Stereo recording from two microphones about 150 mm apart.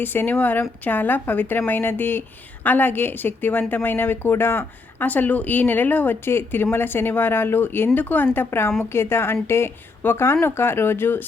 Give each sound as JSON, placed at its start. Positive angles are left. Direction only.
{"t": 0.0, "sound": "a woman's voice", "side_deg": 15}